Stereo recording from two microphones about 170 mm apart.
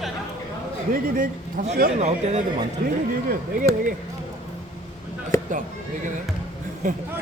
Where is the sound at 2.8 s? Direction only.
60° right (ahead or behind).